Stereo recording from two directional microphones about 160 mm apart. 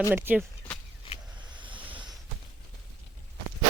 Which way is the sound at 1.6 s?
30° right (ahead or behind).